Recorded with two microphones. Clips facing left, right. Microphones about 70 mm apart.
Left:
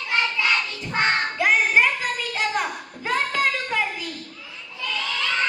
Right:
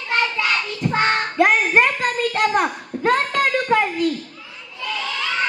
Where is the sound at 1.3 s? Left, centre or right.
Right.